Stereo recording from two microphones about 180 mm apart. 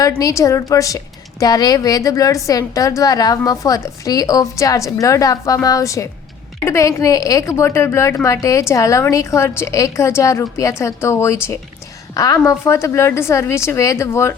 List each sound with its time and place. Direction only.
0.2 s a woman's voice: 20° left (ahead or behind)